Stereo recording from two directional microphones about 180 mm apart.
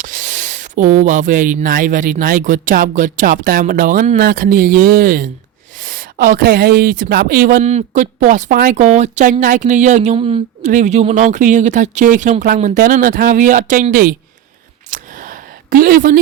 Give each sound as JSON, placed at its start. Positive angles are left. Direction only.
{"t": 0.0, "sound": "speech", "side_deg": -45}
{"t": 7.6, "sound": "speech", "side_deg": -40}
{"t": 10.7, "sound": "speech", "side_deg": -40}
{"t": 14.8, "sound": "a sound", "side_deg": -45}